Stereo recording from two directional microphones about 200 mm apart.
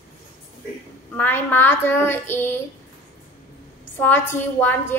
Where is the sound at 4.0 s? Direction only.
10° left (ahead or behind).